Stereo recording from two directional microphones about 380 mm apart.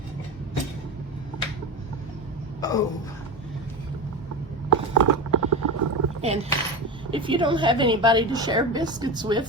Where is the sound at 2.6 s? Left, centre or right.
Centre.